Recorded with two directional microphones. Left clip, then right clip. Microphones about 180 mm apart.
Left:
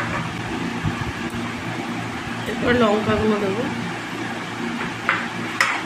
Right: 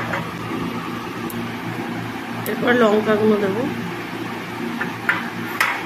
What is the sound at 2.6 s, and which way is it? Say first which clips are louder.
Speech: right 2 dB; 15° right (ahead or behind).